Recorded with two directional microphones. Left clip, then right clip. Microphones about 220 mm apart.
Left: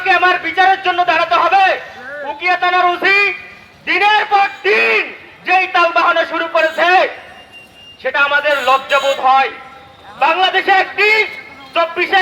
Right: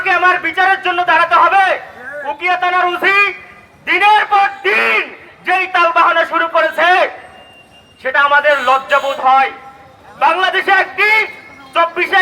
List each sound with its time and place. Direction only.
0.0 s a man's voice: 45° left (ahead or behind)